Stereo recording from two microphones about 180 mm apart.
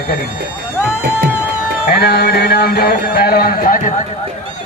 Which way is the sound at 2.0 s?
65° left (ahead or behind).